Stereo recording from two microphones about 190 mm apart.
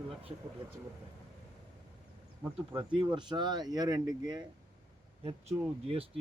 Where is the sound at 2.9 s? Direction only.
25° right (ahead or behind).